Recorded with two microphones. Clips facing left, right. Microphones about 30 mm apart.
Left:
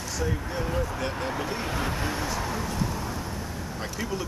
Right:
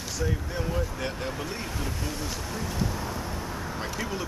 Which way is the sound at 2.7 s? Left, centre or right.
Centre.